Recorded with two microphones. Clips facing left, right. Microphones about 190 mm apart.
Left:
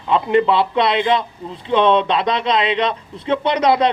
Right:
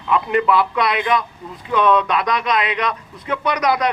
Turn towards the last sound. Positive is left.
turn(degrees=25)  # may be behind; listen again after turning